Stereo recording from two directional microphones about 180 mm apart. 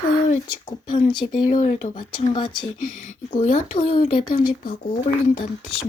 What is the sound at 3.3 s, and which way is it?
Speech, 40° left (ahead or behind).